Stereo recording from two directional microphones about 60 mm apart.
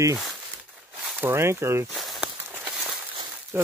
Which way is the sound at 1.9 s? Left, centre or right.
Centre.